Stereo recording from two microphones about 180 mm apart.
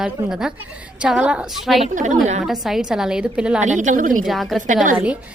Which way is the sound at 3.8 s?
45° right (ahead or behind).